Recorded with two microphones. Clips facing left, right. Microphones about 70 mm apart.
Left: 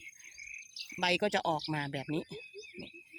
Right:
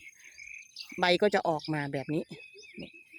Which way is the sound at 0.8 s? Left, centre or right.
Right.